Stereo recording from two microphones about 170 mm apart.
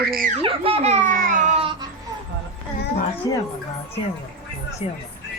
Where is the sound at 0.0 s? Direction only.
60° right (ahead or behind).